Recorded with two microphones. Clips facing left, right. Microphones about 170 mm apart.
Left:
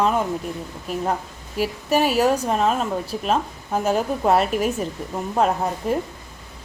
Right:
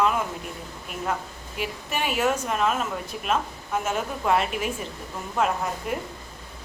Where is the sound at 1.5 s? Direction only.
40° left (ahead or behind).